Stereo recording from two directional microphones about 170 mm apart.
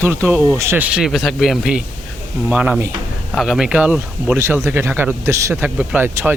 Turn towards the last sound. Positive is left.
turn(degrees=-10)  # may be behind; listen again after turning